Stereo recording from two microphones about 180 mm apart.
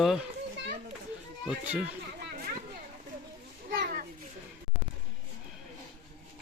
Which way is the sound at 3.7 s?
55° right (ahead or behind).